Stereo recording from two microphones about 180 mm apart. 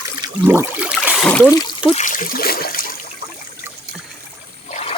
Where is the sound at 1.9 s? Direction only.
40° left (ahead or behind).